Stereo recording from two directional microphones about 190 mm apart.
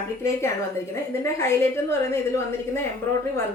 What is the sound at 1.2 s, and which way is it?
Speech, 15° left (ahead or behind).